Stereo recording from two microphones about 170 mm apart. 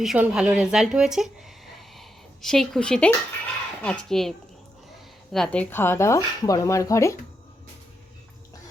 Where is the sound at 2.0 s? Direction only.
Centre (ahead or behind).